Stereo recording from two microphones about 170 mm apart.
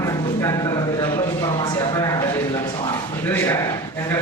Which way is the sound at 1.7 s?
20° left (ahead or behind).